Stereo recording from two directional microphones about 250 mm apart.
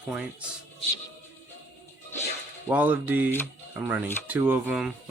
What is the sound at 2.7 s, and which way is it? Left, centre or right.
Speech, centre.